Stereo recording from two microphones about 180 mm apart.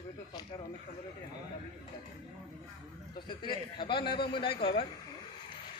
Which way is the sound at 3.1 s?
25° left (ahead or behind).